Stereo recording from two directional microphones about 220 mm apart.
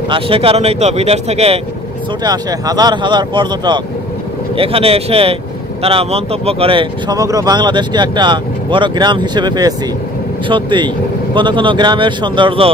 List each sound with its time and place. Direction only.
0.1 s speech: 25° right (ahead or behind)
2.2 s speech: 15° right (ahead or behind)